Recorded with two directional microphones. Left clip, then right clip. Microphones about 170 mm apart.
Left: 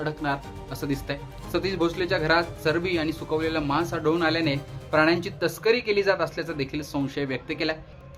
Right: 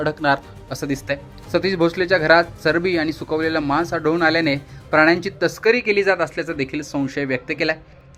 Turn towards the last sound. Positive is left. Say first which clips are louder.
# right 7 dB
turn(degrees=-30)  # may be behind; listen again after turning